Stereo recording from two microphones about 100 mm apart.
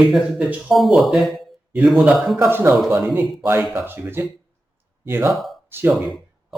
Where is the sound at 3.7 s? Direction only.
20° right (ahead or behind).